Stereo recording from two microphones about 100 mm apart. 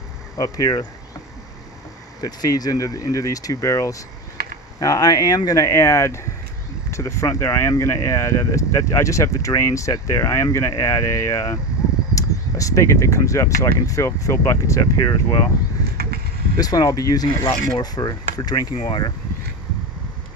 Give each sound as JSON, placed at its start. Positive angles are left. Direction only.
{"t": 0.3, "sound": "speech", "side_deg": 40}
{"t": 2.2, "sound": "speech", "side_deg": 40}
{"t": 16.6, "sound": "speech", "side_deg": 40}
{"t": 18.7, "sound": "speech", "side_deg": 55}